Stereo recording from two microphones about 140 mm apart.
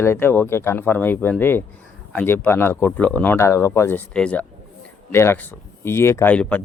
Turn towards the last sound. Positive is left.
turn(degrees=10)  # may be behind; listen again after turning